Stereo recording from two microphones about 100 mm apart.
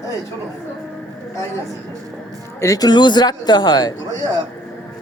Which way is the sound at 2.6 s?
35° left (ahead or behind).